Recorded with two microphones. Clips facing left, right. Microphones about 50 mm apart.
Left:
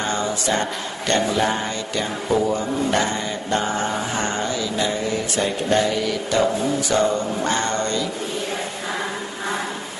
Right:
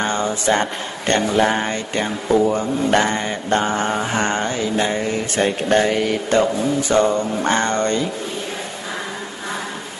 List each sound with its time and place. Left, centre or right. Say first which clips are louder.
0.0 s mantra: right 3 dB; right